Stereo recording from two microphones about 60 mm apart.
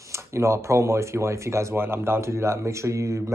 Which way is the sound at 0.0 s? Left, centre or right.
Right.